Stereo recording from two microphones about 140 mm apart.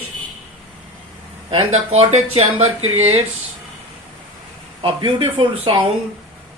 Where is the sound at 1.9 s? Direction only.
50° right (ahead or behind).